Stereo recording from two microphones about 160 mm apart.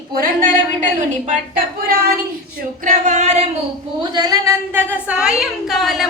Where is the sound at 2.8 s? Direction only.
50° right (ahead or behind).